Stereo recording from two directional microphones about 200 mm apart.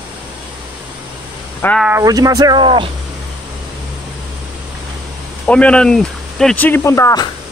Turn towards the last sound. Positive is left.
turn(degrees=15)  # may be behind; listen again after turning